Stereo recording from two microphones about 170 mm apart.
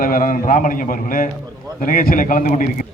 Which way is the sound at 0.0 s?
55° left (ahead or behind).